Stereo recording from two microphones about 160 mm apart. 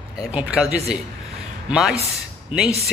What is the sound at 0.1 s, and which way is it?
A man's voice, 5° right (ahead or behind).